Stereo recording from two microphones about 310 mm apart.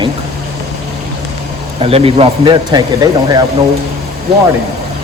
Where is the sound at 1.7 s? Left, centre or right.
Centre.